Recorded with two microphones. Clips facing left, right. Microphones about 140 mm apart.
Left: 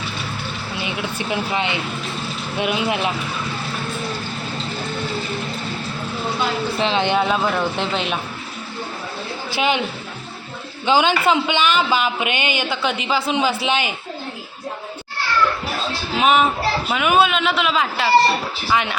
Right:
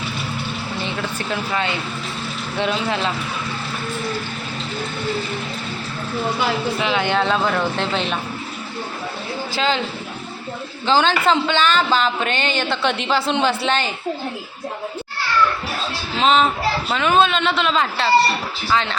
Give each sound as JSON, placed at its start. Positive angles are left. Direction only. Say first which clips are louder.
{"t": 0.8, "sound": "speech", "louder": "left 2 dB", "side_deg": 15}
{"t": 6.7, "sound": "speech", "louder": "left 4 dB", "side_deg": 25}
{"t": 9.6, "sound": "speech", "louder": "left 1 dB", "side_deg": 15}
{"t": 10.8, "sound": "speech", "louder": "even", "side_deg": 10}
{"t": 16.1, "sound": "a man's voice", "louder": "even", "side_deg": 10}